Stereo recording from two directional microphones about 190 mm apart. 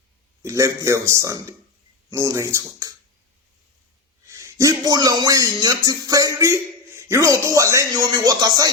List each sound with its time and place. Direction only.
0.4 s speech: 15° right (ahead or behind)
4.3 s speech: 15° right (ahead or behind)